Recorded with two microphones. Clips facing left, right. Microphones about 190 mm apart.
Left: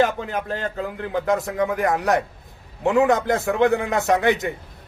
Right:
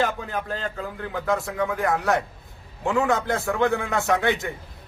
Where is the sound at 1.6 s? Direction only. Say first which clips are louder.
Left 2 dB; 20° left (ahead or behind).